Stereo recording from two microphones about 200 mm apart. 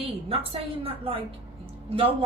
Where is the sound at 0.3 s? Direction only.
30° right (ahead or behind).